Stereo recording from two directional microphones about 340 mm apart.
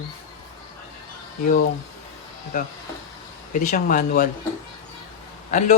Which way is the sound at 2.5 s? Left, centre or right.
Left.